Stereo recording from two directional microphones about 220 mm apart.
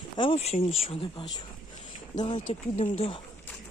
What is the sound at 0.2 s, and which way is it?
Speech, 25° left (ahead or behind).